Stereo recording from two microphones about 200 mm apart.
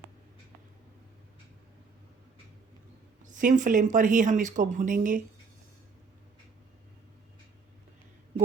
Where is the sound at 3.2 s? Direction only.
40° right (ahead or behind).